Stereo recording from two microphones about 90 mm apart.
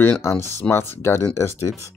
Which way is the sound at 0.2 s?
30° left (ahead or behind).